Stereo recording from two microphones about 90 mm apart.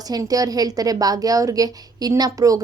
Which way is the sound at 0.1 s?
40° right (ahead or behind).